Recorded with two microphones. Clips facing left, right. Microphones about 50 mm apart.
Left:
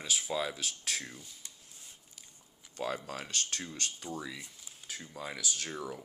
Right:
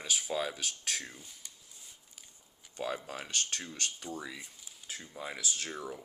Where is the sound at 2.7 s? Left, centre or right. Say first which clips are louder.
Left 1 dB; right.